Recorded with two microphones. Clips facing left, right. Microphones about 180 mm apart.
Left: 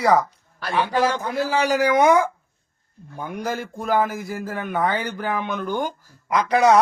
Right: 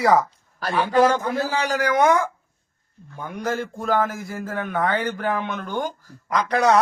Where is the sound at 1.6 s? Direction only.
10° left (ahead or behind).